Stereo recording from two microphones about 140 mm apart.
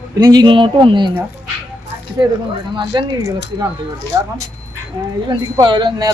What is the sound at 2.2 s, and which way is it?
Speech, 30° right (ahead or behind).